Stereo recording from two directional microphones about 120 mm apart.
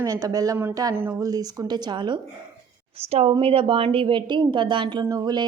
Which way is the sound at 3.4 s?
50° right (ahead or behind).